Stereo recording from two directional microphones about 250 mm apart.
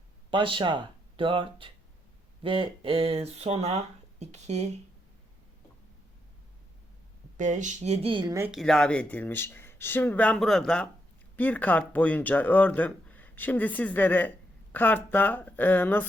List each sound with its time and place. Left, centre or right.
0.3 s speech: centre
7.3 s speech: right; by 8.5 s centre
8.5 s speech: centre